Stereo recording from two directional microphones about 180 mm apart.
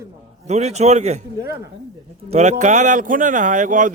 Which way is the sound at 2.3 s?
40° right (ahead or behind).